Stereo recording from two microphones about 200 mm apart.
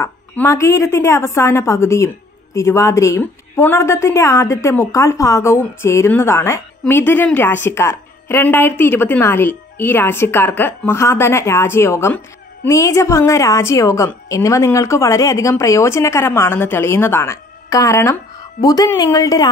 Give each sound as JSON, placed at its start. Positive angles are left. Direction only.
{"t": 0.0, "sound": "a woman's voice", "side_deg": 15}